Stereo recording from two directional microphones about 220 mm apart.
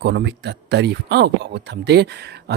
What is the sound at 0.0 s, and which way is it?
Speech, 50° right (ahead or behind).